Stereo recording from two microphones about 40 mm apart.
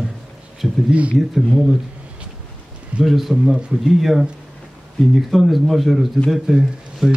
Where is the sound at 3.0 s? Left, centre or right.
Centre.